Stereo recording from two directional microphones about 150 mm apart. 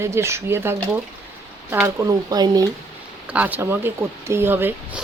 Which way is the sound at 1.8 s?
20° right (ahead or behind).